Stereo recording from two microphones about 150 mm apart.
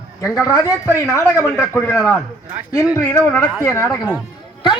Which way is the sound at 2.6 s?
10° right (ahead or behind).